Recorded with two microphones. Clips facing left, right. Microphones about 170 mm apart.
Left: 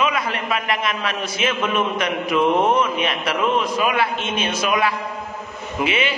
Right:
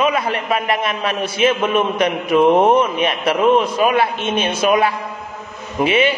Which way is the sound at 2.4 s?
50° right (ahead or behind).